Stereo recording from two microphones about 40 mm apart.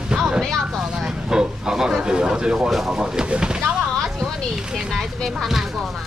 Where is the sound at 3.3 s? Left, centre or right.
Right.